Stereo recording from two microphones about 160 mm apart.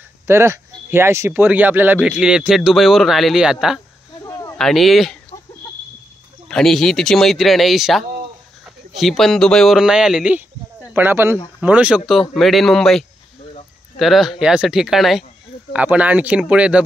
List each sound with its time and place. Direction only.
0.3 s speech: 15° right (ahead or behind)
4.3 s a sound: 20° left (ahead or behind)
4.6 s speech: centre (ahead or behind)
6.5 s speech: 5° left (ahead or behind)